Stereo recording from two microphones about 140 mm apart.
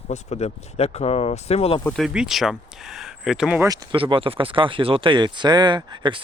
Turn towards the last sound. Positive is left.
turn(degrees=-35)  # may be behind; listen again after turning